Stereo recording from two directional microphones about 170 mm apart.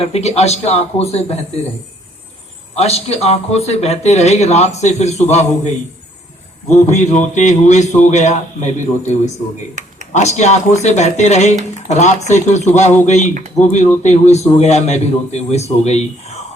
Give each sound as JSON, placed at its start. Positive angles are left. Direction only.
{"t": 0.0, "sound": "a man's voice", "side_deg": 40}
{"t": 2.7, "sound": "a man's voice", "side_deg": 40}
{"t": 6.7, "sound": "a man's voice", "side_deg": 45}